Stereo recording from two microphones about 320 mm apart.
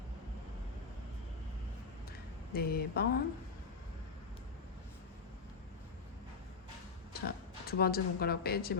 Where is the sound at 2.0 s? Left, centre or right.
Left.